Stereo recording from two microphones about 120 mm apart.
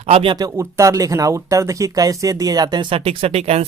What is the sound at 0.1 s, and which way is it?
Speech, 50° right (ahead or behind).